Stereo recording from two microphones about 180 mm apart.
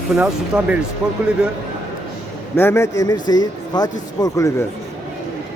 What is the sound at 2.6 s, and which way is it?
A man's voice, 15° left (ahead or behind).